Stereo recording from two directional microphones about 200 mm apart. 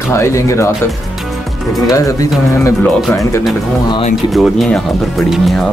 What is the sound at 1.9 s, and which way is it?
Speech, 15° left (ahead or behind).